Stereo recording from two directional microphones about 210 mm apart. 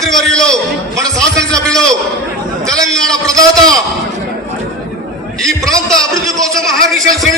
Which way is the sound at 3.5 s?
15° right (ahead or behind).